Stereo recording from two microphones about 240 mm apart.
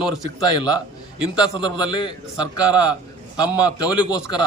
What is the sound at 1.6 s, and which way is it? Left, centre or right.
A man's voice, centre.